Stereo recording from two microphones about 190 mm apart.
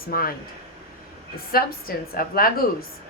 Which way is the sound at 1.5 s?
50° left (ahead or behind).